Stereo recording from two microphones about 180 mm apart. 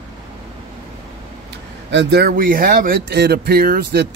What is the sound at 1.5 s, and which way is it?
Speech, 70° right (ahead or behind).